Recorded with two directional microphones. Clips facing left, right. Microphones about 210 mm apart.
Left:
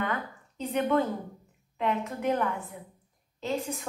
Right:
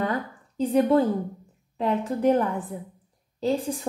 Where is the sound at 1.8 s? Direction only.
35° right (ahead or behind).